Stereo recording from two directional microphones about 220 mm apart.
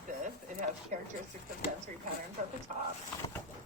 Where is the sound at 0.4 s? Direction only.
35° right (ahead or behind).